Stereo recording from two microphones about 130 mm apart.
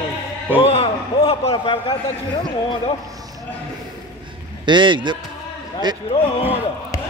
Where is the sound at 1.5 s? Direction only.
40° left (ahead or behind).